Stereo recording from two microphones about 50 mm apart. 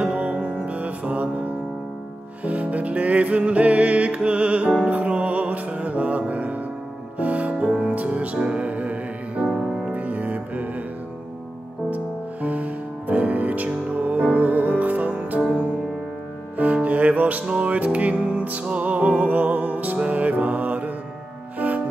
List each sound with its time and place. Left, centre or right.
0.0 s music: right
2.4 s music: right
11.9 s music: right
16.5 s music: right